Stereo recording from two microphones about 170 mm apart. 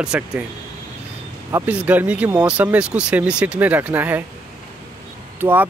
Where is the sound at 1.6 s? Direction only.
10° right (ahead or behind).